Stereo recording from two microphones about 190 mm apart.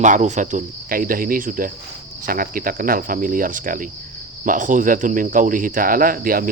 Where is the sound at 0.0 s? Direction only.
40° right (ahead or behind).